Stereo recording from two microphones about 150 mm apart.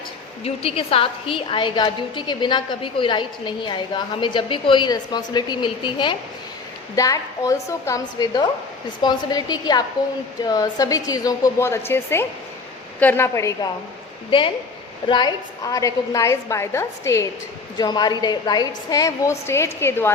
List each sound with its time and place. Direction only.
0.4 s a woman's voice: 40° left (ahead or behind)
6.9 s a woman's voice: 20° left (ahead or behind)
14.3 s a woman's voice: 35° left (ahead or behind); by 17.2 s 20° left (ahead or behind)
17.7 s a woman's voice: 30° left (ahead or behind)